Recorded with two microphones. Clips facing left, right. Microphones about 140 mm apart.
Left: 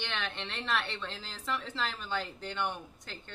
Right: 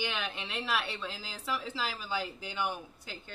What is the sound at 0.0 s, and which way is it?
A woman's voice, 10° right (ahead or behind).